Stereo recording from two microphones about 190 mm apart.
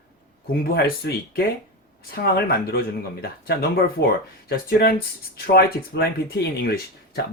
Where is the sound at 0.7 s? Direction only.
55° left (ahead or behind).